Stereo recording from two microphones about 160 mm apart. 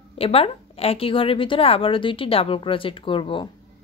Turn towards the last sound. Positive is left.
turn(degrees=30)  # may be behind; listen again after turning